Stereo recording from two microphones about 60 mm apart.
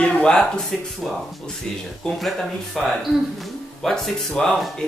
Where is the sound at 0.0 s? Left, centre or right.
Centre.